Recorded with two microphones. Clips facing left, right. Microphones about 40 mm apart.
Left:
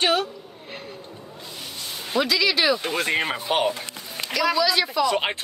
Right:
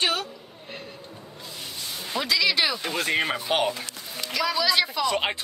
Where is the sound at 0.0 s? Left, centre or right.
Left.